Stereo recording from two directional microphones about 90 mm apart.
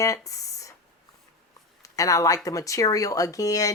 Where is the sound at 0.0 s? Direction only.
35° left (ahead or behind).